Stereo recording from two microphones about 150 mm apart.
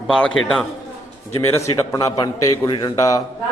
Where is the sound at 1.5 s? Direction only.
20° left (ahead or behind).